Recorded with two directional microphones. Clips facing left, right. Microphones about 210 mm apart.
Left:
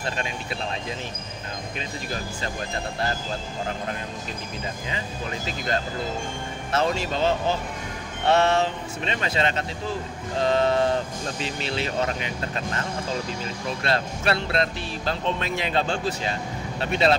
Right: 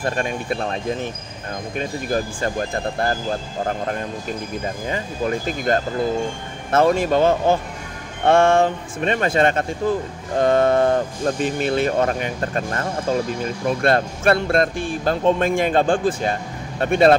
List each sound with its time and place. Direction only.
0.0 s speech: 50° right (ahead or behind)
4.8 s speech: 50° right (ahead or behind)